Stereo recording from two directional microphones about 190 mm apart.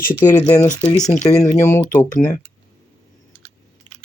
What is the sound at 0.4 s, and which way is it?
Speech, 20° left (ahead or behind).